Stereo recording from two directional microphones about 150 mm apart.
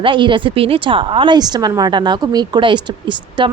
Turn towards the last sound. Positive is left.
turn(degrees=-30)  # may be behind; listen again after turning